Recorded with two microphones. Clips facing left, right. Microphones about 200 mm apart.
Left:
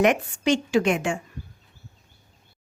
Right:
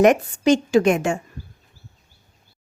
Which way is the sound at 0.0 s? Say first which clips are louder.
Right 5 dB; 40° right (ahead or behind).